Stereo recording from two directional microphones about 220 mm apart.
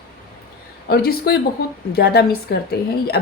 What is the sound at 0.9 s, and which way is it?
A woman's voice, 45° left (ahead or behind).